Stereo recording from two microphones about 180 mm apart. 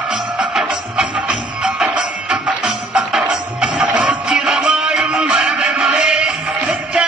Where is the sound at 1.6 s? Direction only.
5° right (ahead or behind).